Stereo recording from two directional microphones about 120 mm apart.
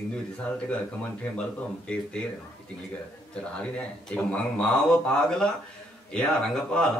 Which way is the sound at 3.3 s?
10° left (ahead or behind).